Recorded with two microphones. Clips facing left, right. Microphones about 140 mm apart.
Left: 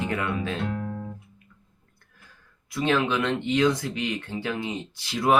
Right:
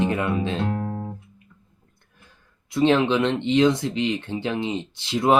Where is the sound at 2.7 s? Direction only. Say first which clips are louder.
Right 5 dB; 25° right (ahead or behind).